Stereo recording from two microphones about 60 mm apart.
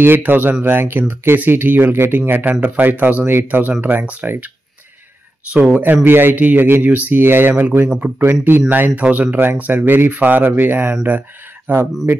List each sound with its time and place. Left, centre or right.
0.0 s speech: right
5.5 s speech: right